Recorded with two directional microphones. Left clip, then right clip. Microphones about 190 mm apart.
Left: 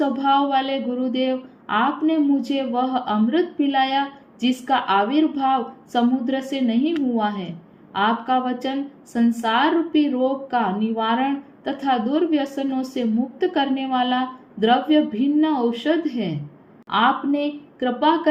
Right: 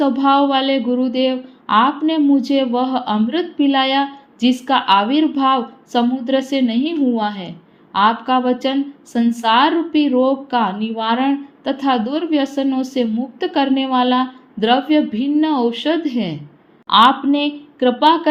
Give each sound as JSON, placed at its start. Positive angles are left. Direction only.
{"t": 0.0, "sound": "speech", "side_deg": -30}